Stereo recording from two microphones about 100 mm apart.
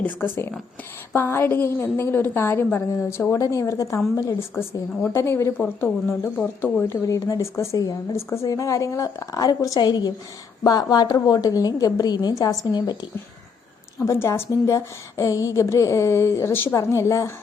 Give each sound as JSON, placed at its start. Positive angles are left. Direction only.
{"t": 0.0, "sound": "a woman's voice", "side_deg": 20}
{"t": 5.0, "sound": "a woman's voice", "side_deg": 25}
{"t": 14.0, "sound": "a woman's voice", "side_deg": 30}